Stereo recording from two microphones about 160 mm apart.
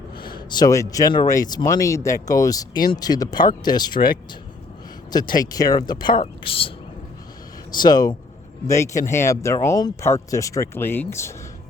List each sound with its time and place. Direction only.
0.3 s speech: 30° left (ahead or behind)
5.1 s speech: 25° left (ahead or behind)